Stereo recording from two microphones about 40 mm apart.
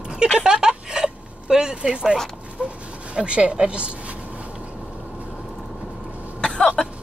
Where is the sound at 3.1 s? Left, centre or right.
Right.